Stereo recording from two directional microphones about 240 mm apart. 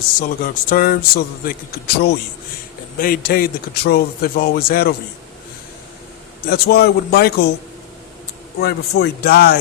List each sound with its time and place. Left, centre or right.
0.2 s a man's voice: left
6.5 s a man's voice: left
8.5 s a man's voice: left